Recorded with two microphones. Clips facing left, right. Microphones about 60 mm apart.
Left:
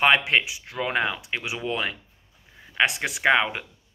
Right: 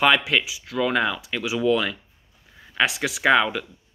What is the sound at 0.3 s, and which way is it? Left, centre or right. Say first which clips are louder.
Speech: even; left.